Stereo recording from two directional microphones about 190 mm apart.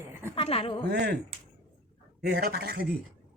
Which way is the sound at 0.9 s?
60° right (ahead or behind).